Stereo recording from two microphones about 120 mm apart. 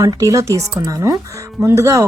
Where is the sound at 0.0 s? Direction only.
30° right (ahead or behind).